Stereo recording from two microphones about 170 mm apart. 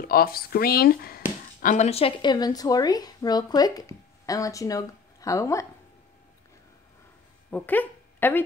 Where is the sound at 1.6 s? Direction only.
50° left (ahead or behind).